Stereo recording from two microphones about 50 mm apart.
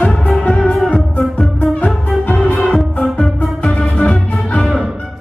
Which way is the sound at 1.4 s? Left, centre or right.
Left.